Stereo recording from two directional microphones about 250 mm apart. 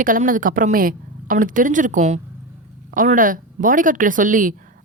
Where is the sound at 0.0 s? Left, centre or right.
Right.